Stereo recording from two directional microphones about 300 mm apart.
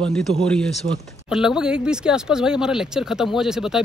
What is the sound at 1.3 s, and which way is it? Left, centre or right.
Speech, centre.